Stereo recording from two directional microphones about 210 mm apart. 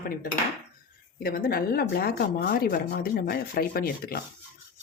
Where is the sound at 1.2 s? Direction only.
45° left (ahead or behind).